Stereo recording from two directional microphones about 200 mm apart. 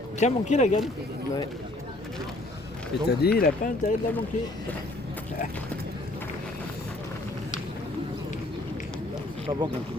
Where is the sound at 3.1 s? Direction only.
50° left (ahead or behind).